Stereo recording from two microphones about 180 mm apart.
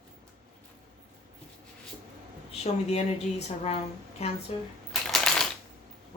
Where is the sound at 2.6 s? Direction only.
35° left (ahead or behind).